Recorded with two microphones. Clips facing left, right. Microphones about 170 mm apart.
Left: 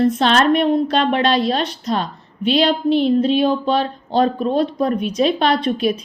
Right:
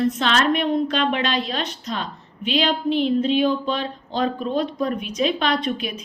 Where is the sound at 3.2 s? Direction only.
35° left (ahead or behind).